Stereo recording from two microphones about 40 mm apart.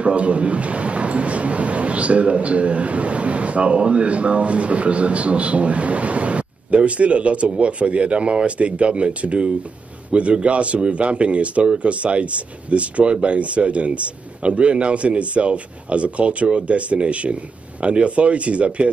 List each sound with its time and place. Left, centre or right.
0.0 s a man's voice: right